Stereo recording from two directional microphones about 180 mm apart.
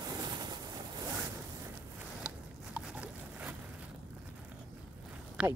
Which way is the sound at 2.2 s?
5° right (ahead or behind).